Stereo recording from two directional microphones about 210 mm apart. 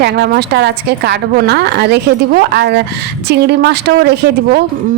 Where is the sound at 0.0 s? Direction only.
55° right (ahead or behind).